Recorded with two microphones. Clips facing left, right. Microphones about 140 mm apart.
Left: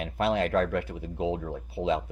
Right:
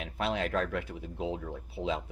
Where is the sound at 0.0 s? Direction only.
Centre (ahead or behind).